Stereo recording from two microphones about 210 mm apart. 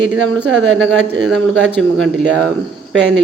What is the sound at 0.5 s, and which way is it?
Speech, 60° right (ahead or behind).